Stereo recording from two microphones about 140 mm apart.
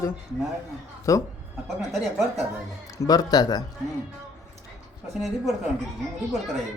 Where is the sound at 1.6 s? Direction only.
Centre (ahead or behind).